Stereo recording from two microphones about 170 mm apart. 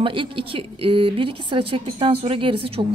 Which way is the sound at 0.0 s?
30° right (ahead or behind).